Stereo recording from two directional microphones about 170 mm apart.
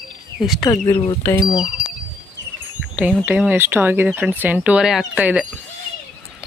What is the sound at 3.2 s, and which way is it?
Speech, 10° right (ahead or behind).